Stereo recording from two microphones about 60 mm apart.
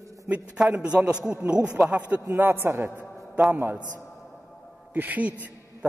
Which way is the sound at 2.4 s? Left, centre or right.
Right.